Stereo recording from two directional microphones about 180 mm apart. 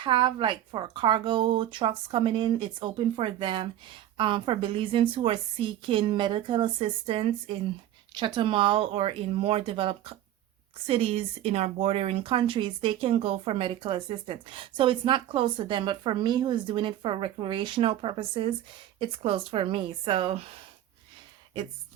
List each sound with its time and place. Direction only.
0.0 s speech: 25° right (ahead or behind)